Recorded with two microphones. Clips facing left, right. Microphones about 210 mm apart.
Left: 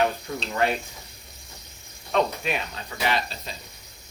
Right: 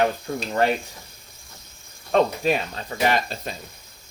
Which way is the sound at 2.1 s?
40° right (ahead or behind).